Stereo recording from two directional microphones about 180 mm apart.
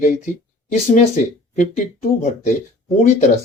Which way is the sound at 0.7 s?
40° left (ahead or behind).